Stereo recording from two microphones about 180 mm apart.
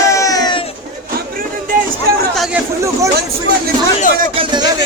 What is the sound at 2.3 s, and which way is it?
Speech, centre (ahead or behind).